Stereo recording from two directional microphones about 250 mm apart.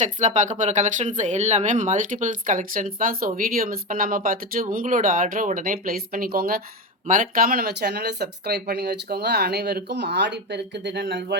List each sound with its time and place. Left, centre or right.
0.0 s speech: right